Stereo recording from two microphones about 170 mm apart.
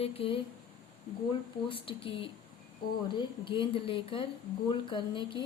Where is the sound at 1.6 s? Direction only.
30° left (ahead or behind).